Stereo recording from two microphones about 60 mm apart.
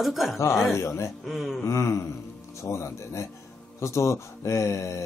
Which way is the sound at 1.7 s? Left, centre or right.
Left.